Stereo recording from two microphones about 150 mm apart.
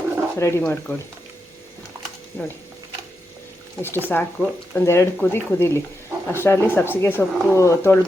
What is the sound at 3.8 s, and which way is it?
Speech, 15° left (ahead or behind).